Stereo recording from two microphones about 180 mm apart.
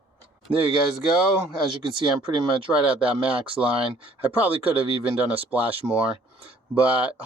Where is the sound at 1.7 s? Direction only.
30° right (ahead or behind).